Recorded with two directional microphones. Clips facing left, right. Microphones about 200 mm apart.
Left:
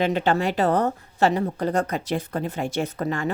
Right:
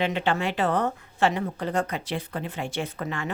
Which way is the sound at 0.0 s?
40° left (ahead or behind).